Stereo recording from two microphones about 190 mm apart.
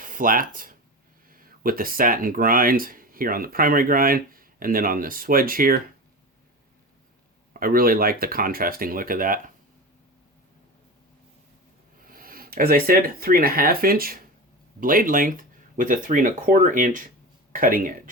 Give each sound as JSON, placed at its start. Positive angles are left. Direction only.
{"t": 0.0, "sound": "speech", "side_deg": -45}
{"t": 7.5, "sound": "speech", "side_deg": -50}
{"t": 12.0, "sound": "speech", "side_deg": -50}